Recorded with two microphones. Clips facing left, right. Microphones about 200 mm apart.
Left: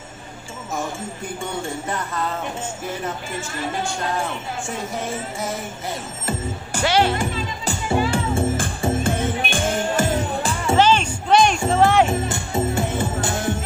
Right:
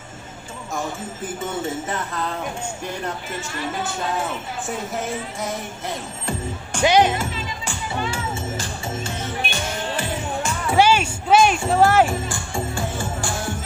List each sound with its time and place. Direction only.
3.3 s speech: centre (ahead or behind)
6.8 s speech: 15° right (ahead or behind)
8.1 s music: 55° left (ahead or behind); by 10.8 s 30° left (ahead or behind)
10.8 s music: 10° right (ahead or behind)
12.1 s music: 20° left (ahead or behind)